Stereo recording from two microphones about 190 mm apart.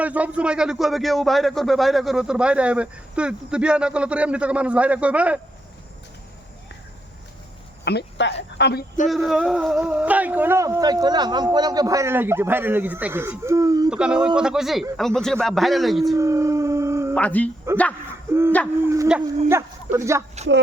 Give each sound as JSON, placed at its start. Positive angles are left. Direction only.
{"t": 0.0, "sound": "speech", "side_deg": -5}
{"t": 7.9, "sound": "speech", "side_deg": 65}
{"t": 9.0, "sound": "speech", "side_deg": 0}
{"t": 13.9, "sound": "speech", "side_deg": -5}
{"t": 16.1, "sound": "howl", "side_deg": -15}
{"t": 17.2, "sound": "speech", "side_deg": 5}
{"t": 18.8, "sound": "speech", "side_deg": -15}